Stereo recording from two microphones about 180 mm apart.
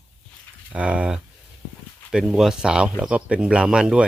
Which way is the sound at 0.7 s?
5° right (ahead or behind).